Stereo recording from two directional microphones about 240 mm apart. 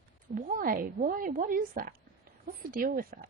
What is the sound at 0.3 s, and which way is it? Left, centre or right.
A woman's voice, right.